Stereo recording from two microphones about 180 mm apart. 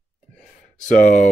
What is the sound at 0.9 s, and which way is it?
Speech, 45° left (ahead or behind).